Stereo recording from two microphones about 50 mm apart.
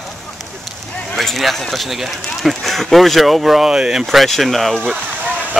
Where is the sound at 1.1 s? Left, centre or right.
Centre.